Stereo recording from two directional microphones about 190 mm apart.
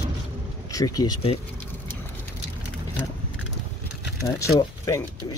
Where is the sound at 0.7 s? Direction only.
20° left (ahead or behind).